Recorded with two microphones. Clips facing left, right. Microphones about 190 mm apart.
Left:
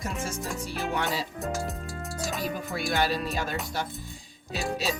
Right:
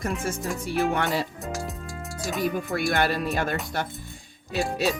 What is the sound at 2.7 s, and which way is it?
Speech, 60° right (ahead or behind).